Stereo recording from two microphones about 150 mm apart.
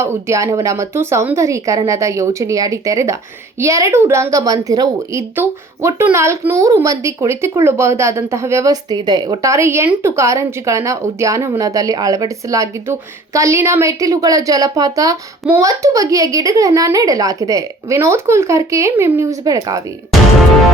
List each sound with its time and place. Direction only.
0.0 s speech: 20° right (ahead or behind)
5.4 s speech: 15° right (ahead or behind)